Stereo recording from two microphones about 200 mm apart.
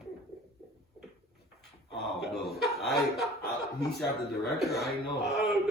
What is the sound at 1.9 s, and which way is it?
A man's voice, centre (ahead or behind).